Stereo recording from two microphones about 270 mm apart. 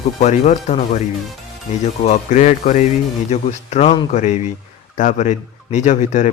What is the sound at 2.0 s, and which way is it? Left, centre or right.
Speech, left.